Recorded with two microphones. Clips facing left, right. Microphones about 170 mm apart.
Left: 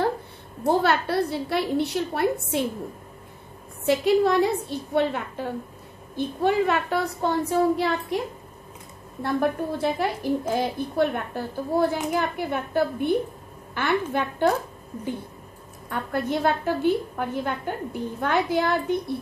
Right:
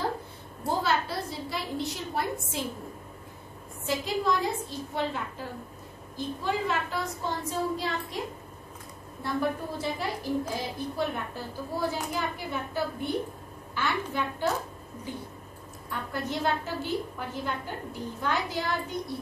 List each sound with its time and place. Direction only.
0.7 s a woman's voice: 65° left (ahead or behind)
3.8 s a woman's voice: 65° left (ahead or behind)
9.2 s a woman's voice: 60° left (ahead or behind)
15.9 s a woman's voice: 55° left (ahead or behind)